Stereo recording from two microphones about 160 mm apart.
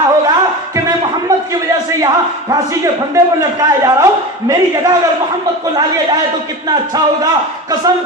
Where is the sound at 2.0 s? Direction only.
25° right (ahead or behind).